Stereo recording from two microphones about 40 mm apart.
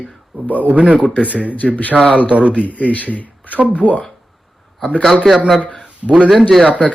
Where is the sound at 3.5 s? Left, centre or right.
Right.